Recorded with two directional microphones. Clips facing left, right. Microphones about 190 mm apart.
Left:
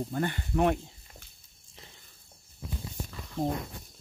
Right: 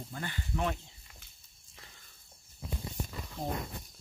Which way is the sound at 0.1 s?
50° left (ahead or behind).